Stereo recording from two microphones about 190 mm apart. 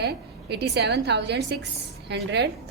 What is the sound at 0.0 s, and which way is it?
A woman's voice, 60° right (ahead or behind).